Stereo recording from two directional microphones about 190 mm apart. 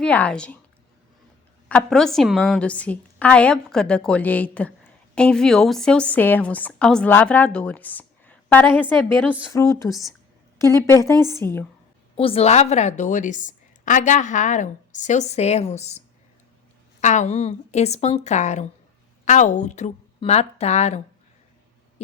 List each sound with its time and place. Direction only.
0.0 s speech: 5° left (ahead or behind)
1.6 s a woman's voice: 5° left (ahead or behind)
11.0 s a woman's voice: 20° right (ahead or behind)
11.3 s a woman's voice: 10° left (ahead or behind)
12.1 s a woman's voice: 30° left (ahead or behind)